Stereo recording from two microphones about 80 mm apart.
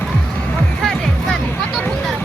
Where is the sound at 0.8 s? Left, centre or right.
Centre.